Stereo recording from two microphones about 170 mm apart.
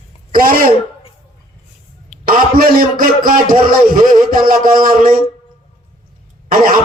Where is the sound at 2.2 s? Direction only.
55° right (ahead or behind).